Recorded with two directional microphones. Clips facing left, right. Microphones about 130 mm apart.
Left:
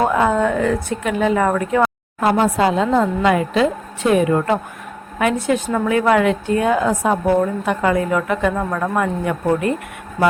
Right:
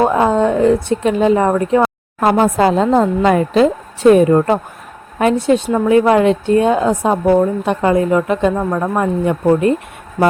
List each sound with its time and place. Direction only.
0.0 s a woman's voice: 25° right (ahead or behind)
2.2 s a woman's voice: 40° right (ahead or behind)